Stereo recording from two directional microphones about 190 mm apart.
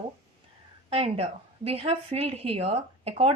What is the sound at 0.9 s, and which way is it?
Speech, 30° right (ahead or behind).